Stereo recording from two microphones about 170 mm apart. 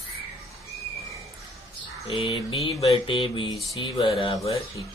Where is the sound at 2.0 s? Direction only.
35° left (ahead or behind).